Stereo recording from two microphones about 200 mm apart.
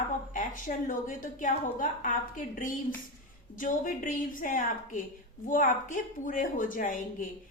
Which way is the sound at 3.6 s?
40° left (ahead or behind).